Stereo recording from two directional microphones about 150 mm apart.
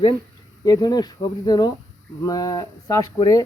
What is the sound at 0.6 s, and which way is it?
Speech, 25° left (ahead or behind).